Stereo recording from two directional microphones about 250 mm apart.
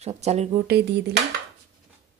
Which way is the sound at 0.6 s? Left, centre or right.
Right.